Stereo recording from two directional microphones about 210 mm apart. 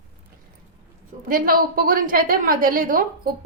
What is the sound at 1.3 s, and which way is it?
A woman's voice, 45° right (ahead or behind).